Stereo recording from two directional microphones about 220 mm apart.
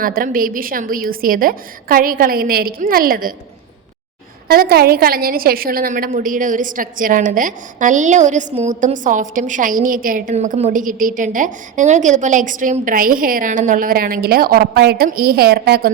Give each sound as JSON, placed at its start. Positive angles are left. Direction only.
{"t": 0.0, "sound": "a woman's voice", "side_deg": -40}
{"t": 4.4, "sound": "a woman's voice", "side_deg": -45}